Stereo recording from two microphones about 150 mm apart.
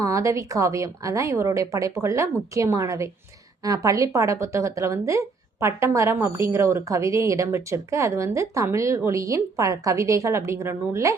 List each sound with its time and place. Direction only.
0.0 s a woman's voice: 20° right (ahead or behind)